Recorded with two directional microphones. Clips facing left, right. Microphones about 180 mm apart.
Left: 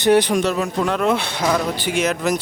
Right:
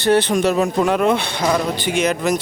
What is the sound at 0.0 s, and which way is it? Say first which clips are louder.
Speech: left 1 dB; 10° left (ahead or behind).